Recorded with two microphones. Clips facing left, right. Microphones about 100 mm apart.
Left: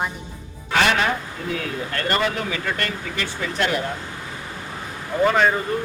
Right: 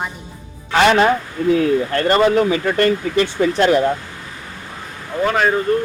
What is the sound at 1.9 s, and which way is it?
Speech, 25° right (ahead or behind).